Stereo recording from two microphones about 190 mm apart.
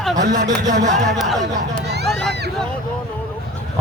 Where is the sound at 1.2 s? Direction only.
Centre (ahead or behind).